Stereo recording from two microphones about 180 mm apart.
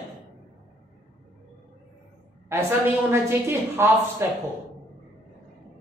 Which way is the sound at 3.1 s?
15° right (ahead or behind).